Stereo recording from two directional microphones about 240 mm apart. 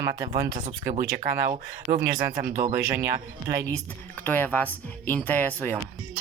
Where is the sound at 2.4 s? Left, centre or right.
Right.